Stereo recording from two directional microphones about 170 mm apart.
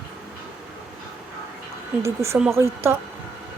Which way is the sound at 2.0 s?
15° right (ahead or behind).